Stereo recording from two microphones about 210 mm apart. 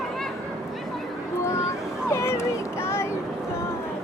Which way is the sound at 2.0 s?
10° left (ahead or behind).